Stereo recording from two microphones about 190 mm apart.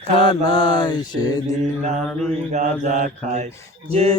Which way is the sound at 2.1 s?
5° left (ahead or behind).